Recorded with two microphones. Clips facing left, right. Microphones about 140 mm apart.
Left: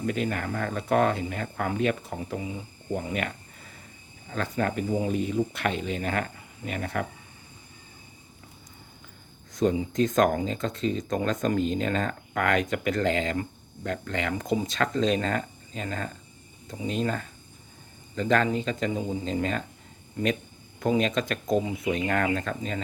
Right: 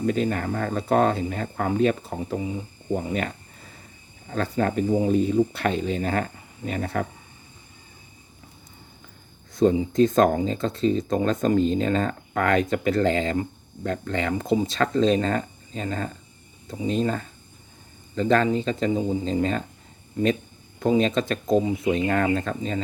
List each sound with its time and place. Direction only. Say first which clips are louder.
0.0 s speech: right 5 dB; 35° right (ahead or behind)
9.6 s speech: right 5 dB; 30° right (ahead or behind)
20.7 s speech: right 4 dB; 25° right (ahead or behind)